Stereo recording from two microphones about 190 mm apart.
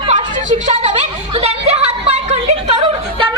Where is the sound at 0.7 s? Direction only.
35° right (ahead or behind).